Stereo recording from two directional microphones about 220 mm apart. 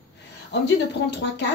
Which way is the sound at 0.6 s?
50° left (ahead or behind).